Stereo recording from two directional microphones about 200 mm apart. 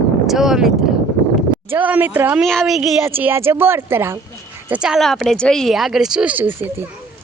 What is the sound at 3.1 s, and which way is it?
Speech, 10° right (ahead or behind).